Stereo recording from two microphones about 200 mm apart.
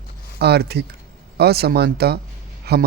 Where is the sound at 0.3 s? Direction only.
55° right (ahead or behind).